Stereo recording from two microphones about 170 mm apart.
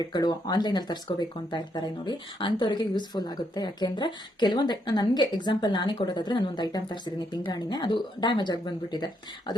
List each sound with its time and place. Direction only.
0.0 s speech: 25° left (ahead or behind)